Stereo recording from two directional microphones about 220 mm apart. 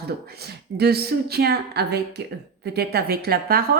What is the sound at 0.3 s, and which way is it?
Speech, 45° right (ahead or behind).